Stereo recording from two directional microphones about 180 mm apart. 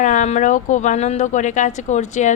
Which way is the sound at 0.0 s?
45° left (ahead or behind).